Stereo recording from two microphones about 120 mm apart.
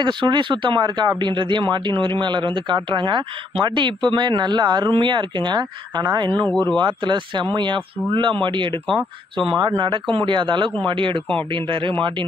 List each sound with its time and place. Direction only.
0.0 s speech: 40° right (ahead or behind)
6.4 s speech: 10° left (ahead or behind)
6.8 s speech: 40° right (ahead or behind)
9.8 s speech: 45° right (ahead or behind)